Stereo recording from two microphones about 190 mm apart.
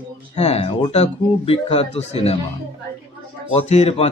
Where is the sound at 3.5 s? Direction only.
35° left (ahead or behind).